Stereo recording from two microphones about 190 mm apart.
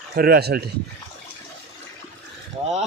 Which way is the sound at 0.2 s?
55° right (ahead or behind).